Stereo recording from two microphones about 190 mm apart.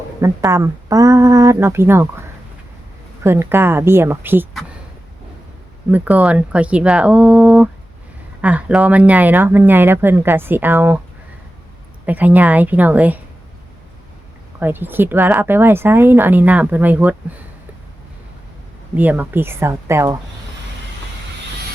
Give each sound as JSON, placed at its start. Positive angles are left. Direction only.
{"t": 0.2, "sound": "speech", "side_deg": -15}
{"t": 3.2, "sound": "speech", "side_deg": -10}
{"t": 5.9, "sound": "speech", "side_deg": -5}
{"t": 12.0, "sound": "speech", "side_deg": -10}
{"t": 14.6, "sound": "speech", "side_deg": -10}
{"t": 18.9, "sound": "speech", "side_deg": -10}